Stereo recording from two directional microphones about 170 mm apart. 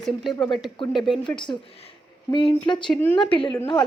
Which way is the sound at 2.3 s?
30° left (ahead or behind).